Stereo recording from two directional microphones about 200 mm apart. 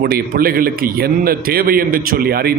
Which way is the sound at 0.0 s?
50° right (ahead or behind).